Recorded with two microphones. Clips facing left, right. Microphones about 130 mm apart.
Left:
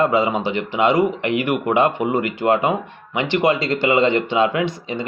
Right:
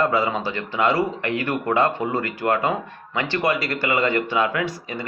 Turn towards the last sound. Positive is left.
turn(degrees=20)  # may be behind; listen again after turning